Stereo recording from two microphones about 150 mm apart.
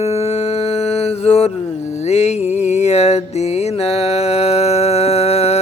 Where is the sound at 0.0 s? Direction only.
45° left (ahead or behind).